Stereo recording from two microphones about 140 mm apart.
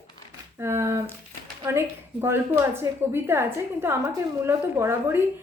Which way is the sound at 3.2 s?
15° right (ahead or behind).